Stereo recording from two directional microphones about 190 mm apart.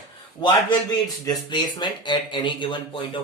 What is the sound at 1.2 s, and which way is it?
Speech, 20° left (ahead or behind).